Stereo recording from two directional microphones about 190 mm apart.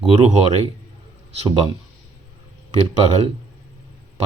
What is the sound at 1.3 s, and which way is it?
Speech, 30° right (ahead or behind).